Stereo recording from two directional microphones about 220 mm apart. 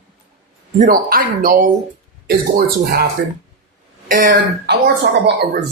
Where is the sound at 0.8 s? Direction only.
40° right (ahead or behind).